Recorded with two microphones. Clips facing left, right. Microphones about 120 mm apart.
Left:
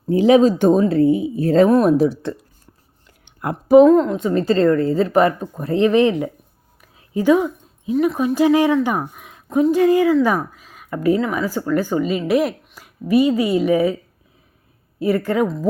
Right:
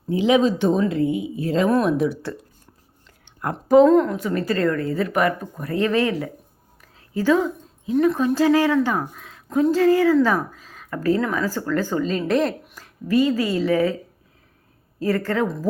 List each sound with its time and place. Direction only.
0.1 s speech: 40° left (ahead or behind)
3.2 s a woman's voice: 15° left (ahead or behind)
6.8 s a sound: 15° left (ahead or behind)
8.0 s speech: 15° left (ahead or behind)
14.9 s speech: 15° left (ahead or behind)